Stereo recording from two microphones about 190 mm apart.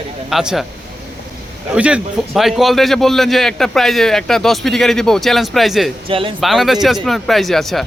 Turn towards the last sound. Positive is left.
turn(degrees=0)  # may be behind; listen again after turning